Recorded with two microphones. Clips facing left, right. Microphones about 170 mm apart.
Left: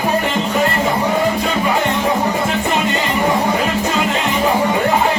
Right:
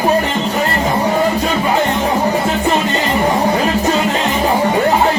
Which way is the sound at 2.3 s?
35° right (ahead or behind).